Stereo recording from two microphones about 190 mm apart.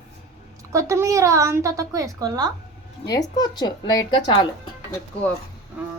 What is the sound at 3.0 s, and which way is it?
A woman's voice, 20° left (ahead or behind).